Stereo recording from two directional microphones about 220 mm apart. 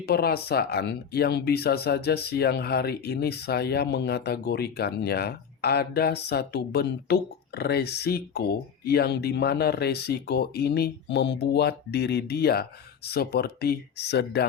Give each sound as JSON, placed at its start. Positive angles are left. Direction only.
{"t": 0.0, "sound": "speech", "side_deg": 45}